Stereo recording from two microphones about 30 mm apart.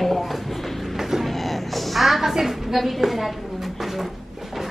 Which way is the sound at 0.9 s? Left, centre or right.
Centre.